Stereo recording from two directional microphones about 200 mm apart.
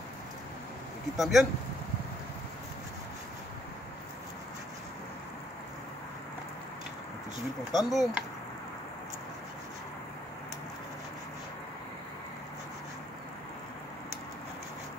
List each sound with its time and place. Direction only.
1.1 s speech: centre (ahead or behind)
7.7 s speech: centre (ahead or behind)